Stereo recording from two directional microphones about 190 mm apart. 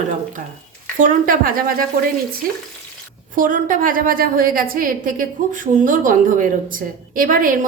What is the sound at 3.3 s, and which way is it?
A woman's voice, 45° right (ahead or behind).